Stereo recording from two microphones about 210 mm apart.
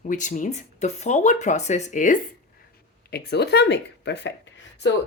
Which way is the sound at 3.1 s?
50° left (ahead or behind).